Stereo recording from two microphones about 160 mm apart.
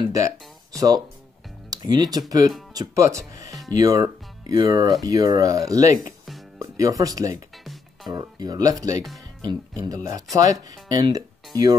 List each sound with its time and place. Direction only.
0.7 s speech: 25° right (ahead or behind)
7.6 s music: centre (ahead or behind)
8.1 s speech: 25° right (ahead or behind)